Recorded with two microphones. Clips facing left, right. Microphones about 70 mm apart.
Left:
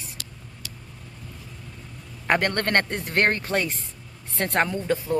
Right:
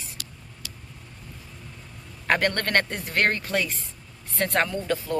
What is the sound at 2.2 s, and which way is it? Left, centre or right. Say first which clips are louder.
Speech: left 1 dB; left.